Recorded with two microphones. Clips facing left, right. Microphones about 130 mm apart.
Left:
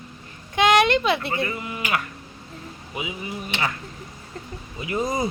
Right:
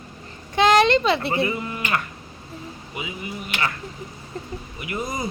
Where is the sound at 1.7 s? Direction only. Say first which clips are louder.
Right 1 dB; 10° left (ahead or behind).